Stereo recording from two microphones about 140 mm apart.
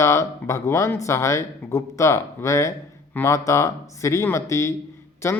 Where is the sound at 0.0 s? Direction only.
20° left (ahead or behind).